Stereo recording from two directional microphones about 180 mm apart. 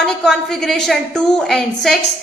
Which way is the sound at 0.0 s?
Centre (ahead or behind).